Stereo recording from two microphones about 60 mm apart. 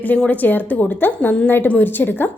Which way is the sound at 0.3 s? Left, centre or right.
Left.